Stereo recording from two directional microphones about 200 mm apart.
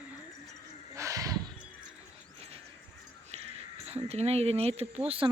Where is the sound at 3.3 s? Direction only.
30° right (ahead or behind).